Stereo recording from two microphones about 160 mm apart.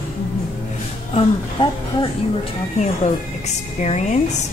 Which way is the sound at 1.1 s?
35° left (ahead or behind).